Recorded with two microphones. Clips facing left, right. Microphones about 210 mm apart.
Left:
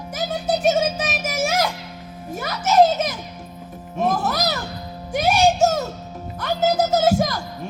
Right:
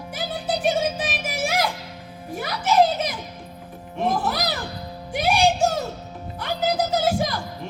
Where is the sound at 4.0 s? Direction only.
40° left (ahead or behind).